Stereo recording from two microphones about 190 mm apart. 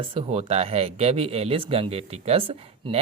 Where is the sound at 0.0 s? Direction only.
30° right (ahead or behind).